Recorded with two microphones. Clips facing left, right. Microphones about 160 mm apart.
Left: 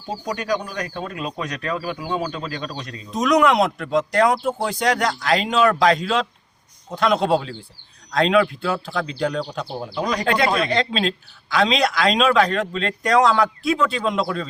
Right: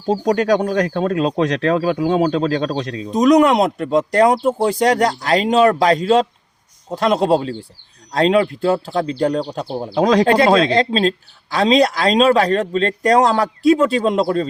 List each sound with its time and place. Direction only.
0.3 s speech: 90° right
3.1 s speech: 40° right (ahead or behind)
9.9 s speech: 90° right
10.8 s speech: 35° right (ahead or behind)